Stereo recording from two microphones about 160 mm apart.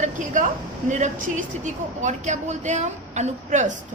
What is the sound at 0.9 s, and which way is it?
A woman's voice, 50° right (ahead or behind).